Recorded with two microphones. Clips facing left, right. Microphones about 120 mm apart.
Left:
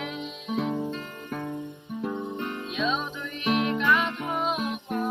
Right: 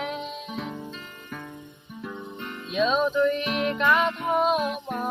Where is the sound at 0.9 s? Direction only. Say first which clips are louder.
Left 5 dB; 35° left (ahead or behind).